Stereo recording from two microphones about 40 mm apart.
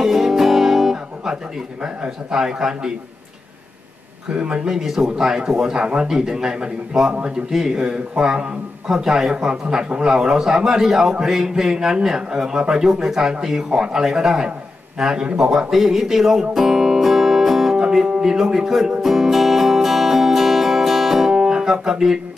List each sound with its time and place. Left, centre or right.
0.0 s music: centre
2.3 s a man's voice: centre
4.4 s a man's voice: centre
15.7 s music: centre
18.2 s a man's voice: centre
19.0 s music: centre
21.3 s music: centre